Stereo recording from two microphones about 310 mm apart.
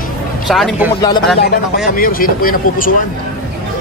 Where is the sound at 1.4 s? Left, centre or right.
Left.